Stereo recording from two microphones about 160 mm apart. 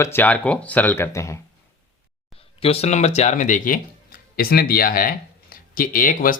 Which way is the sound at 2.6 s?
40° left (ahead or behind).